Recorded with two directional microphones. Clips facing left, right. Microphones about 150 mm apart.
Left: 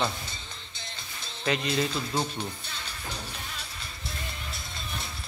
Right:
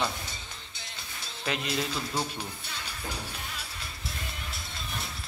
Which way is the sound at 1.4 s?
5° right (ahead or behind).